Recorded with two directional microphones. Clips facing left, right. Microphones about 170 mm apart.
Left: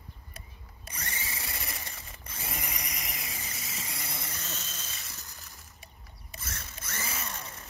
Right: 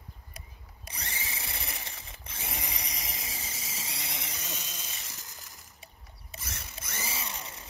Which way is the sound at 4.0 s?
15° right (ahead or behind).